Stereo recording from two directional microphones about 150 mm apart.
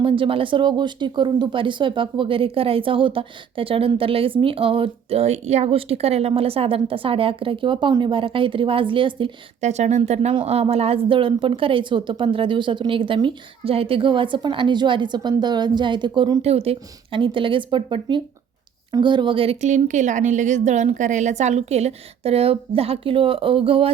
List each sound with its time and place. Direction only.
0.0 s speech: 35° right (ahead or behind)
9.6 s a woman's voice: 50° right (ahead or behind); by 16.4 s 30° right (ahead or behind)
16.4 s speech: 40° right (ahead or behind)
19.6 s a woman's voice: 55° right (ahead or behind); by 23.9 s 35° right (ahead or behind)